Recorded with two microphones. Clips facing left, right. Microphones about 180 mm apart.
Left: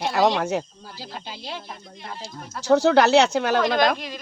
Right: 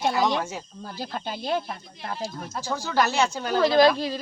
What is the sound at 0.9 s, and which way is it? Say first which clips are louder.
Speech: right 5 dB; 50° right (ahead or behind).